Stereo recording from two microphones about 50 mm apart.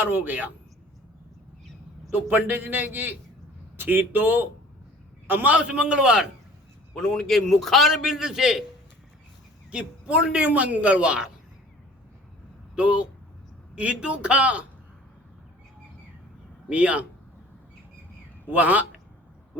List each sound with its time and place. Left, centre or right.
0.0 s a man's voice: right
2.1 s a man's voice: right
5.5 s a man's voice: right
6.9 s a man's voice: centre
8.0 s a man's voice: centre
9.7 s a man's voice: right
12.7 s a man's voice: right
16.6 s a man's voice: right
18.5 s a man's voice: right